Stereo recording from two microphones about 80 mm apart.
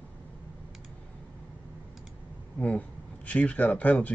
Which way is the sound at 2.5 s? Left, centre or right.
Centre.